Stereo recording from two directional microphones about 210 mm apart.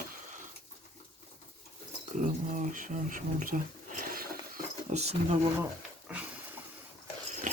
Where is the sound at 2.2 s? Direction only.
40° right (ahead or behind).